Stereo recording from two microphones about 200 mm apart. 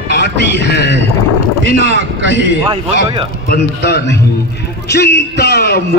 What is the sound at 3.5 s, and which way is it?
A man's voice, 55° left (ahead or behind).